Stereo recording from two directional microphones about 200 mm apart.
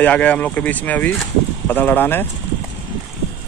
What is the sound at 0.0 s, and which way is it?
Speech, 5° left (ahead or behind).